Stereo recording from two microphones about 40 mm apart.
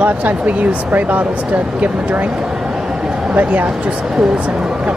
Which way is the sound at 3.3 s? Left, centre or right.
Right.